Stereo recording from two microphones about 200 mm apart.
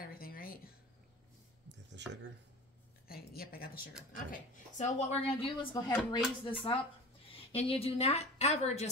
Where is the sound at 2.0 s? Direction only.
60° right (ahead or behind).